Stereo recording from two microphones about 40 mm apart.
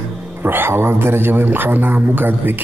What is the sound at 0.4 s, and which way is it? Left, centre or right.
Speech, right.